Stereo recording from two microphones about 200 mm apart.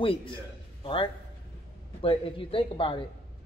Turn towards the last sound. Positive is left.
turn(degrees=25)  # may be behind; listen again after turning